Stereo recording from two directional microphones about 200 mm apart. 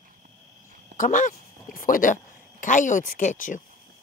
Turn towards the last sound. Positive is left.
turn(degrees=40)  # may be behind; listen again after turning